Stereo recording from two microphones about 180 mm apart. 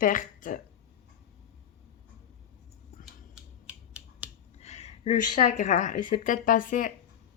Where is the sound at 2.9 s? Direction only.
50° left (ahead or behind).